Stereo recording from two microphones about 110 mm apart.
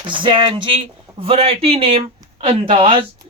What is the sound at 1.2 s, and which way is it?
Speech, 65° right (ahead or behind).